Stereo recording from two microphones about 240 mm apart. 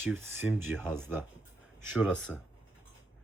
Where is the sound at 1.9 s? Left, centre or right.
Centre.